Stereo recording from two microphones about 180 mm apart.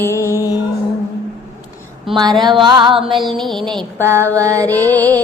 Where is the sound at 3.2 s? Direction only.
Centre (ahead or behind).